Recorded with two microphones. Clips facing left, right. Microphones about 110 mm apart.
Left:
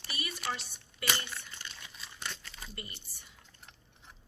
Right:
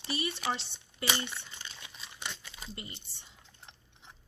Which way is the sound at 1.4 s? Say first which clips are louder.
Even; 20° right (ahead or behind).